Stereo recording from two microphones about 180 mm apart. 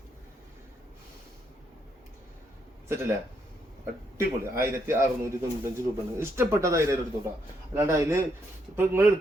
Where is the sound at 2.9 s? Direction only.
15° right (ahead or behind).